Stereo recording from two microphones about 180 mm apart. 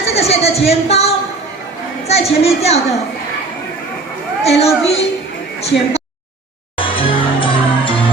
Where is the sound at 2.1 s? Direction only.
35° left (ahead or behind).